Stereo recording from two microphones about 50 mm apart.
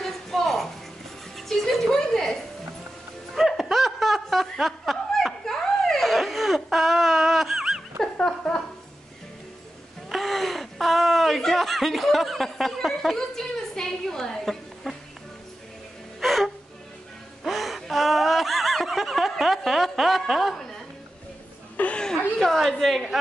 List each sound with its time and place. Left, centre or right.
0.0 s a sound: centre
1.3 s music: centre
3.3 s music: centre
3.7 s snicker: centre
8.0 s a sound: centre
10.0 s a sound: centre
16.2 s gasp: centre
17.5 s snicker: centre
20.2 s chuckle: centre
21.7 s chuckle: left
22.0 s chuckle: centre
22.7 s a sound: centre